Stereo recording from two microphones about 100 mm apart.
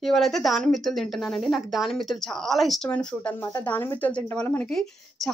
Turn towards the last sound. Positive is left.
turn(degrees=0)  # may be behind; listen again after turning